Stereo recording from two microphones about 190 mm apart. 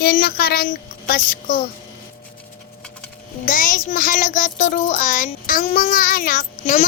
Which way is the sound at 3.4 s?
45° left (ahead or behind).